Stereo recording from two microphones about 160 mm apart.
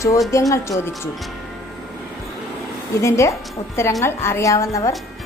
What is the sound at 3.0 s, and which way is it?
A woman's voice, 20° left (ahead or behind).